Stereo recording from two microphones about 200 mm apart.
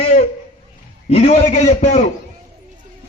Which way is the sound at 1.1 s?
30° left (ahead or behind).